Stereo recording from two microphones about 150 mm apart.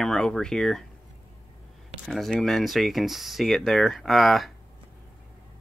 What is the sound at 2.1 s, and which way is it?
Speech, centre (ahead or behind).